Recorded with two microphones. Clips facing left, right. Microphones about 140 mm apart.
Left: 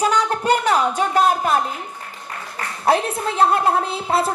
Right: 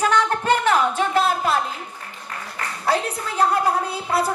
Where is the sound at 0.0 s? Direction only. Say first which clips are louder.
Left 1 dB; 15° left (ahead or behind).